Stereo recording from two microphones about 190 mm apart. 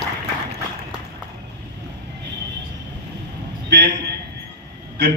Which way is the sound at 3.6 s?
60° right (ahead or behind).